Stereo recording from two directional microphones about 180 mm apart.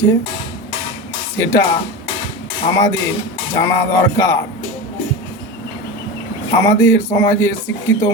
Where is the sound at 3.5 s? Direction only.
15° left (ahead or behind).